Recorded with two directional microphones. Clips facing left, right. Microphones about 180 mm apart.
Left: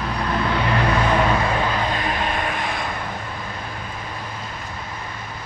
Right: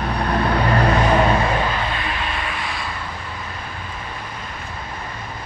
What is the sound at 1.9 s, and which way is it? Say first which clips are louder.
Vehicle: left 3 dB; 40° left (ahead or behind).